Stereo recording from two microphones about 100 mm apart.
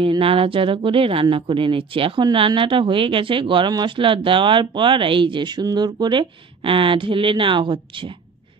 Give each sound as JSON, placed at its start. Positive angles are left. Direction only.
{"t": 0.0, "sound": "speech", "side_deg": -70}